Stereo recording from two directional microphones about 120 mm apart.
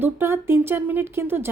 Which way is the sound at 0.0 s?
20° right (ahead or behind).